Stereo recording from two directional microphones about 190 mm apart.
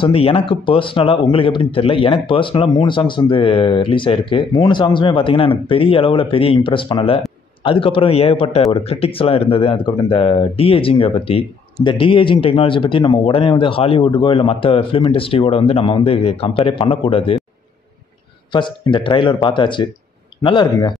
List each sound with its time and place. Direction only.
0.0 s speech: 30° left (ahead or behind)
18.5 s speech: 25° left (ahead or behind)